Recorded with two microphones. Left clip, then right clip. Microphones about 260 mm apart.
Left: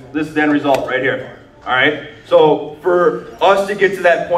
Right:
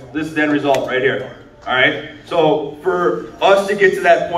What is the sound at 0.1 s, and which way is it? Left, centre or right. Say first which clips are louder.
A man's voice: left 2 dB; left.